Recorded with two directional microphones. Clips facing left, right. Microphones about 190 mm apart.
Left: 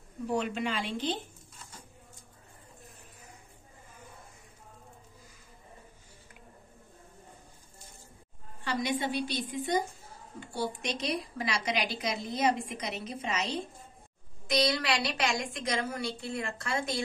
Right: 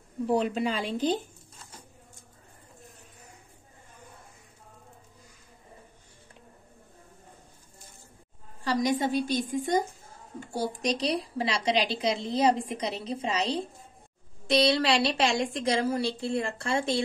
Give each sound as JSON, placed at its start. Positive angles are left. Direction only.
{"t": 0.3, "sound": "a woman's voice", "side_deg": -35}
{"t": 8.6, "sound": "a woman's voice", "side_deg": -40}